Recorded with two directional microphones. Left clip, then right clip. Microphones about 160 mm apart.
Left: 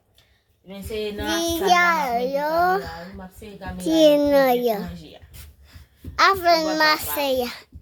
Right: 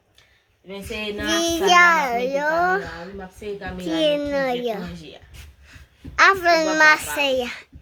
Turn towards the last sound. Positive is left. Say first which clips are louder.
# right 1 dB
turn(degrees=15)  # may be behind; listen again after turning